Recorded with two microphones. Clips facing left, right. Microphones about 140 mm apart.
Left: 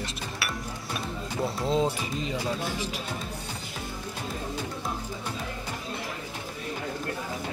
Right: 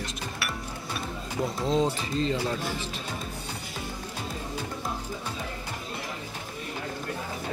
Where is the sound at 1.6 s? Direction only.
5° left (ahead or behind).